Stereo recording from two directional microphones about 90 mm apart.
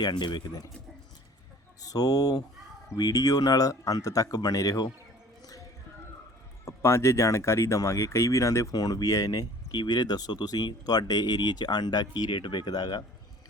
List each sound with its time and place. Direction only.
0.0 s speech: 50° left (ahead or behind)
1.8 s speech: 40° left (ahead or behind)
6.7 s speech: 30° left (ahead or behind); by 13.1 s 50° left (ahead or behind)